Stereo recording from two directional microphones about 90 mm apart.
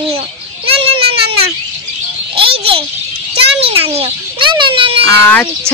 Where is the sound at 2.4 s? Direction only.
90° right.